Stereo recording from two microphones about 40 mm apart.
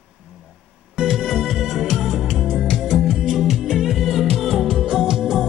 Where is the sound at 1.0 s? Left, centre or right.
Centre.